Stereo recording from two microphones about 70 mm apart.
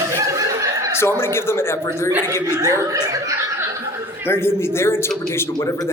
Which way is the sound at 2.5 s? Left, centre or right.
Right.